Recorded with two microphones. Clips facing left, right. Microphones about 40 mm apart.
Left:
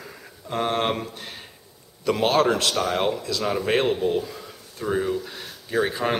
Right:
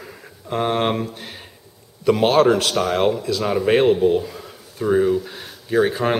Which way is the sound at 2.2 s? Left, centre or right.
Right.